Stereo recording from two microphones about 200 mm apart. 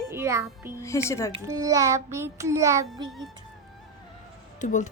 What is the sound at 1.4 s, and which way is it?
Child singing, 15° right (ahead or behind).